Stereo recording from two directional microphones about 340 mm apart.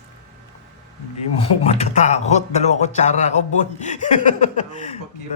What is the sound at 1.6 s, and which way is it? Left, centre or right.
Speech, centre.